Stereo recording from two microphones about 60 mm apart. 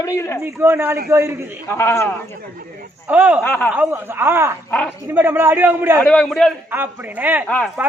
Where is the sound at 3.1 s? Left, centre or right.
Right.